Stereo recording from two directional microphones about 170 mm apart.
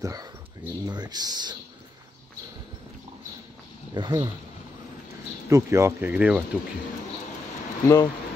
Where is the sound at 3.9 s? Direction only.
25° right (ahead or behind).